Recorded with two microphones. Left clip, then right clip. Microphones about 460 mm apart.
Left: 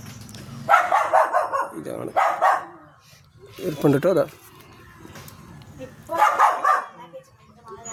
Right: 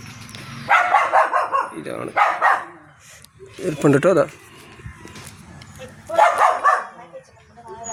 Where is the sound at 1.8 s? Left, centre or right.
Left.